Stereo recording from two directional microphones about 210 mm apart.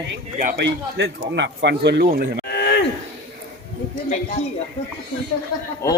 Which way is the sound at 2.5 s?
55° left (ahead or behind).